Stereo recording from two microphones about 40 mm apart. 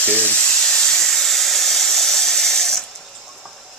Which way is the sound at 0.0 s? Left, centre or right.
Left.